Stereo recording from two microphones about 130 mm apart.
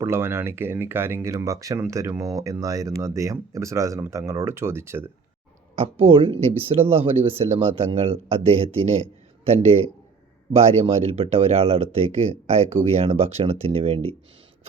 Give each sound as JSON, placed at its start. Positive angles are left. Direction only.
{"t": 0.0, "sound": "speech", "side_deg": -20}
{"t": 5.7, "sound": "speech", "side_deg": -50}
{"t": 10.5, "sound": "speech", "side_deg": -55}